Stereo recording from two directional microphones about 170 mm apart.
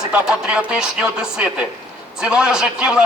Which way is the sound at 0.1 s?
5° right (ahead or behind).